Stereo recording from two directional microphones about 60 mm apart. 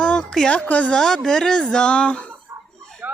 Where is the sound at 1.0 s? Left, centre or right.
Centre.